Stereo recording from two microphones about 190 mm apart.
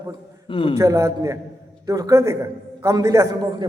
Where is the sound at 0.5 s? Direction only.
25° left (ahead or behind).